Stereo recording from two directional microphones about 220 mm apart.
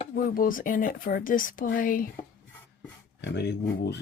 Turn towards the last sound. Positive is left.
turn(degrees=50)  # may be behind; listen again after turning